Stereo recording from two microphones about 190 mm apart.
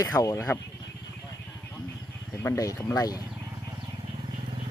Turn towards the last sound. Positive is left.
turn(degrees=20)  # may be behind; listen again after turning